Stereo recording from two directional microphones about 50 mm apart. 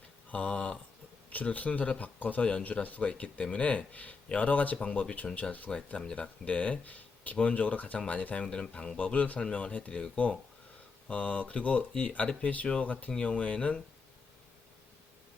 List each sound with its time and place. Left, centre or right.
0.3 s a sound: left
1.3 s a man's voice: left
8.4 s speech: centre
9.0 s a man's voice: left